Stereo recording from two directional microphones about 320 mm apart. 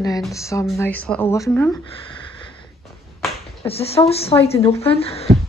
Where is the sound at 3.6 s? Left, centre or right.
Centre.